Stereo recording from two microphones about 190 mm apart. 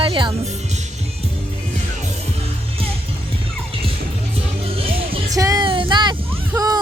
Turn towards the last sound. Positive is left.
turn(degrees=-20)  # may be behind; listen again after turning